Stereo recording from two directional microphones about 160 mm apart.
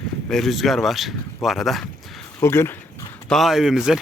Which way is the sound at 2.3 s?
15° left (ahead or behind).